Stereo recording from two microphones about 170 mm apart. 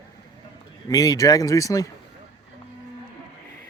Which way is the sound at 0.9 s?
20° left (ahead or behind).